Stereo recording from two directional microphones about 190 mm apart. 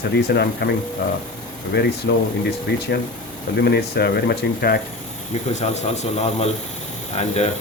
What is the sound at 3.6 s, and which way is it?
Speech, 55° left (ahead or behind).